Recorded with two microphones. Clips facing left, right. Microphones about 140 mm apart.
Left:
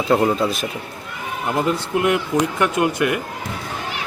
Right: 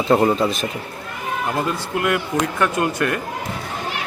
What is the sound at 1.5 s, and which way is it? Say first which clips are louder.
Speech: left 3 dB; 20° left (ahead or behind).